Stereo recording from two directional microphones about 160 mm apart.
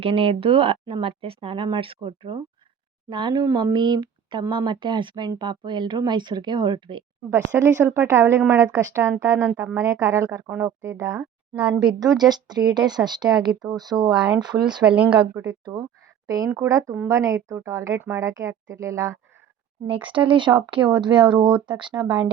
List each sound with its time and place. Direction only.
0.0 s speech: 35° right (ahead or behind)
7.6 s speech: 15° right (ahead or behind)
14.1 s speech: 5° right (ahead or behind)
14.6 s speech: 30° right (ahead or behind)
14.8 s speech: 10° right (ahead or behind)
16.2 s a woman's voice: 20° right (ahead or behind)
19.9 s speech: 30° right (ahead or behind)
22.0 s speech: 10° right (ahead or behind)